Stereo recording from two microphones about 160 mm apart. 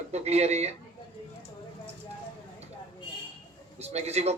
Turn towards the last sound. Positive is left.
turn(degrees=-45)  # may be behind; listen again after turning